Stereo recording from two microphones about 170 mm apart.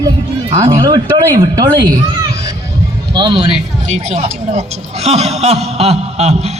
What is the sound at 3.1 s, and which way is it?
Speech, 25° right (ahead or behind).